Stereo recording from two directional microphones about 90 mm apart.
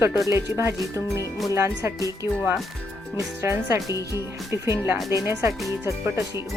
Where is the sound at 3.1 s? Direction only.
35° right (ahead or behind).